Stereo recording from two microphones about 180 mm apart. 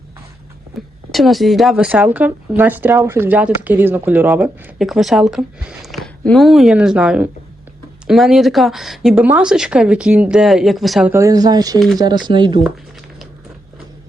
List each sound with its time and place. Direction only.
1.1 s speech: centre (ahead or behind)
11.1 s speech: 20° right (ahead or behind)